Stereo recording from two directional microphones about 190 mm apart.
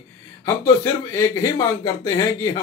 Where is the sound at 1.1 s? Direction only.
15° left (ahead or behind).